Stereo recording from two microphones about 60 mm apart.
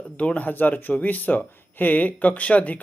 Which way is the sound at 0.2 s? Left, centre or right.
Left.